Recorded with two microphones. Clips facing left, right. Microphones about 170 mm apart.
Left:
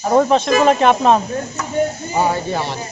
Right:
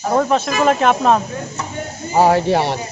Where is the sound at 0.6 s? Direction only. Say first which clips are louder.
Even; centre (ahead or behind).